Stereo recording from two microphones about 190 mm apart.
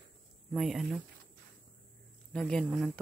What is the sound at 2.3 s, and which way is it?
Speech, 5° left (ahead or behind).